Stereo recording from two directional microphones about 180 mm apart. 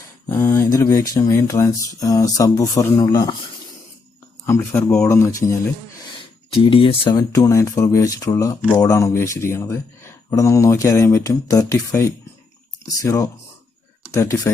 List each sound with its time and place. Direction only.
0.3 s speech: 15° left (ahead or behind)
4.4 s speech: 15° left (ahead or behind)
6.7 s speech: 30° left (ahead or behind)